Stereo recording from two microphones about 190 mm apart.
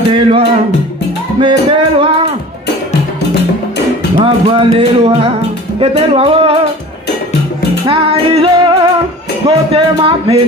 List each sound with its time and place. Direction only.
0.1 s music: 30° right (ahead or behind)
4.2 s music: 30° right (ahead or behind)
5.8 s speech: 30° right (ahead or behind)
7.8 s music: 30° right (ahead or behind)
9.5 s speech: 25° right (ahead or behind)